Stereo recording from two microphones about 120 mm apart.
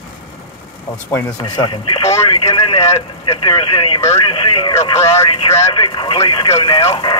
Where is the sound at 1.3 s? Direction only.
35° left (ahead or behind).